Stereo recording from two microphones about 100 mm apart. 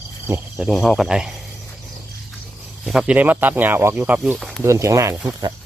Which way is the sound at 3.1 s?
15° right (ahead or behind).